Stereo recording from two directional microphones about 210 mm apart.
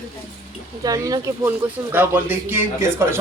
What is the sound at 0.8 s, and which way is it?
Speech, 15° right (ahead or behind).